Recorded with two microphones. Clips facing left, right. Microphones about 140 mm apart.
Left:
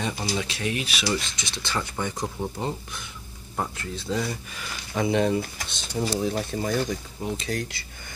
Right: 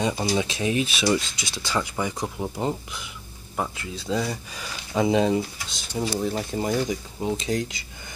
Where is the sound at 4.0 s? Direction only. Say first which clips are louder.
Right 2 dB; 5° right (ahead or behind).